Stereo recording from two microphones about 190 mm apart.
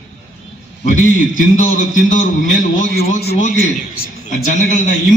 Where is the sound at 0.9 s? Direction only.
40° left (ahead or behind).